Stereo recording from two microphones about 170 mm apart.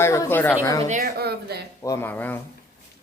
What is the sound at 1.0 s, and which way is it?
Speech, 70° right (ahead or behind).